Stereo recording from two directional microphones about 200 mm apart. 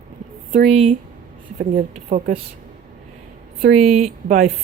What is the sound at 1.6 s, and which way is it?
Speech, 40° right (ahead or behind).